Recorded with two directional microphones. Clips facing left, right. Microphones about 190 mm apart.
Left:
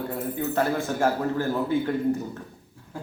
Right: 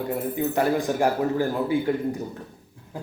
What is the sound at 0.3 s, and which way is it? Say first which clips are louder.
A man's voice: right 2 dB; 15° right (ahead or behind).